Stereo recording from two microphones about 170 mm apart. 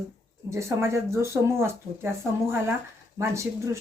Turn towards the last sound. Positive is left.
turn(degrees=-15)  # may be behind; listen again after turning